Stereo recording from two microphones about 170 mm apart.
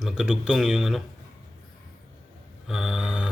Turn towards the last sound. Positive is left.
turn(degrees=-5)  # may be behind; listen again after turning